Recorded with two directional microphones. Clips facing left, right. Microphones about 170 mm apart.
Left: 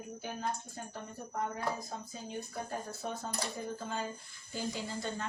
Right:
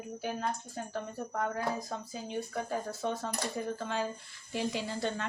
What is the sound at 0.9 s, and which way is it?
Speech, 90° right.